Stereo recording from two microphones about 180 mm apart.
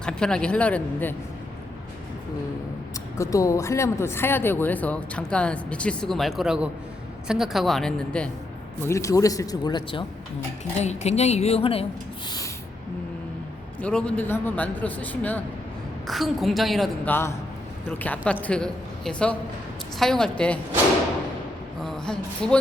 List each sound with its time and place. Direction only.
0.0 s speech: 5° left (ahead or behind)
3.2 s a woman's voice: 15° left (ahead or behind)
8.8 s speech: 15° left (ahead or behind)
10.8 s a woman's voice: 40° left (ahead or behind)
13.8 s a woman's voice: 5° left (ahead or behind)
17.1 s a woman's voice: 15° left (ahead or behind)
21.8 s speech: 5° left (ahead or behind)